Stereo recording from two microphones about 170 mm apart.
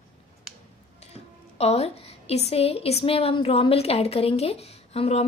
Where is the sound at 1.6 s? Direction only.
40° left (ahead or behind).